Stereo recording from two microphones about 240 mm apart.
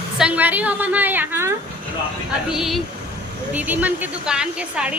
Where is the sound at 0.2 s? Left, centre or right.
Centre.